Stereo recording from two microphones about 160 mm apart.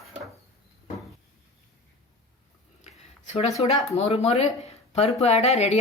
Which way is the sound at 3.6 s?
40° left (ahead or behind).